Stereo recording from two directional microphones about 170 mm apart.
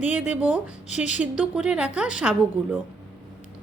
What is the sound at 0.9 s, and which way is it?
Speech, 45° left (ahead or behind).